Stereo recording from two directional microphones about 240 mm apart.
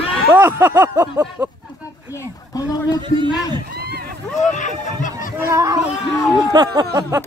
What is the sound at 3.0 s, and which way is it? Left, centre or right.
Speech, centre.